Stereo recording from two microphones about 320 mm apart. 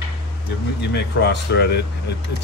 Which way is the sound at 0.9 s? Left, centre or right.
Left.